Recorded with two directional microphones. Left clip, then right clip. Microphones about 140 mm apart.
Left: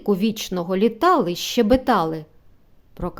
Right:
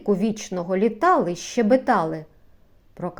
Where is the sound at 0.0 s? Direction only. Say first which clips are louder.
Left 1 dB; 25° left (ahead or behind).